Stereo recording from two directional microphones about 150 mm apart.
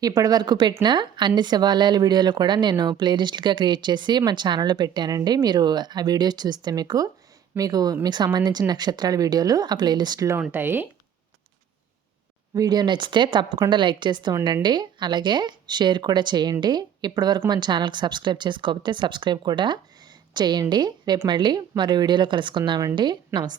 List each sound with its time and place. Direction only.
0.0 s speech: 25° right (ahead or behind)
12.5 s speech: 25° right (ahead or behind)